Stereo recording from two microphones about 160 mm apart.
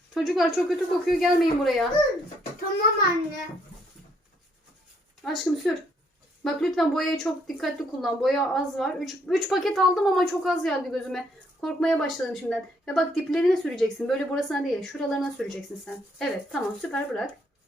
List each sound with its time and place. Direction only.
0.1 s speech: centre (ahead or behind)
5.2 s speech: centre (ahead or behind)